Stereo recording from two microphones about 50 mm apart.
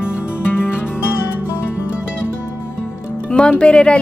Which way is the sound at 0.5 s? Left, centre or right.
Left.